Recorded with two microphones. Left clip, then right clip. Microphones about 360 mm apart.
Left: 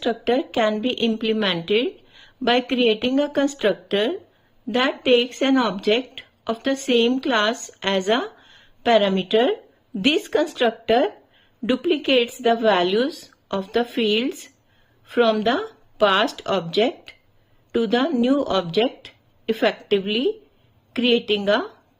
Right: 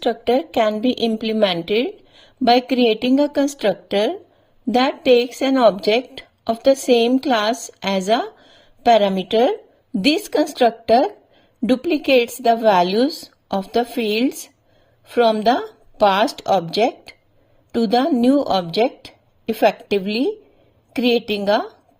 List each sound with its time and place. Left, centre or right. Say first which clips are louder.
0.6 s a woman's voice: right 3 dB; centre
21.4 s speech: right 2 dB; centre